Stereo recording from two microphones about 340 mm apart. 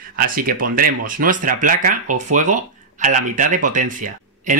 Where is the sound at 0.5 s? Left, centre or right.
Right.